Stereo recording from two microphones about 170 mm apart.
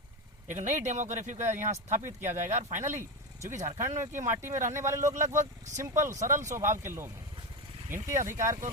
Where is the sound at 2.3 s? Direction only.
45° right (ahead or behind).